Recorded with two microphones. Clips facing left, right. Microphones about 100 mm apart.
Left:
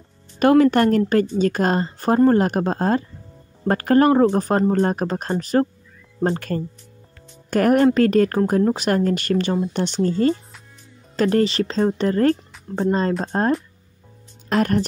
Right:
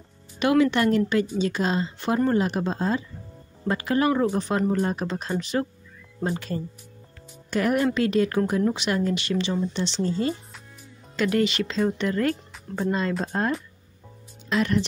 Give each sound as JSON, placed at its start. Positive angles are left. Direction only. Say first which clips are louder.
{"t": 0.4, "sound": "speech", "louder": "left 6 dB", "side_deg": 45}
{"t": 6.2, "sound": "speech", "louder": "left 6 dB", "side_deg": 55}
{"t": 11.1, "sound": "speech", "louder": "left 5 dB", "side_deg": 40}
{"t": 14.5, "sound": "speech", "louder": "left 4 dB", "side_deg": 45}